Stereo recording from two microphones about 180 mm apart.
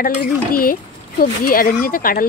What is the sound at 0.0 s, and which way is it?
Speech, 50° left (ahead or behind).